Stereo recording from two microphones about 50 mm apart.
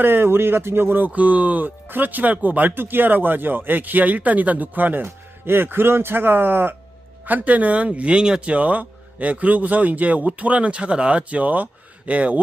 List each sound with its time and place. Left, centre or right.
0.0 s speech: right
5.0 s speech: right
7.3 s speech: right; by 8.5 s centre
8.5 s speech: right